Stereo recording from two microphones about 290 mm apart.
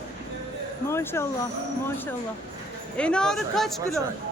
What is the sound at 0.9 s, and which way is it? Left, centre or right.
Speech, centre.